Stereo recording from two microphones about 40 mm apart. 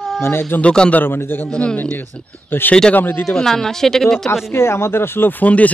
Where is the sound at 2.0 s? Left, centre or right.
Left.